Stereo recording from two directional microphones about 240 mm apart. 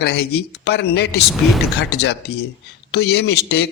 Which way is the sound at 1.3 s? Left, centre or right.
Centre.